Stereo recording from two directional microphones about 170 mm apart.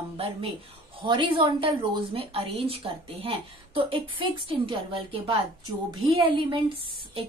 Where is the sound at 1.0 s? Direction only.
30° right (ahead or behind).